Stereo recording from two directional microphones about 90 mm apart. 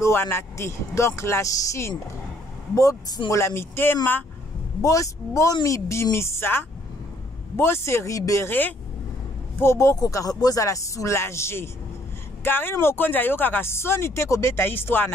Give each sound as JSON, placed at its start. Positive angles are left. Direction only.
{"t": 0.0, "sound": "speech", "side_deg": 25}
{"t": 4.8, "sound": "speech", "side_deg": 35}
{"t": 6.1, "sound": "speech", "side_deg": 30}
{"t": 8.5, "sound": "speech", "side_deg": 20}
{"t": 9.6, "sound": "speech", "side_deg": 30}
{"t": 9.9, "sound": "speech", "side_deg": 40}